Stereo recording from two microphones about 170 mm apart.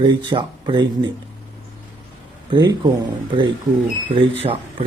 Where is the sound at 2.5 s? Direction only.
25° right (ahead or behind).